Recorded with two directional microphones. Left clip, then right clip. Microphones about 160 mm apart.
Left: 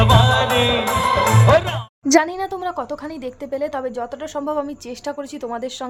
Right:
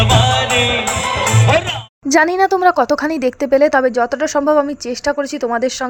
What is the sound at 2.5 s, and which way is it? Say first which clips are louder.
Speech: right 13 dB; 45° right (ahead or behind).